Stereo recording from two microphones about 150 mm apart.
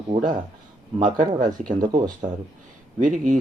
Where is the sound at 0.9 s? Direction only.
60° right (ahead or behind).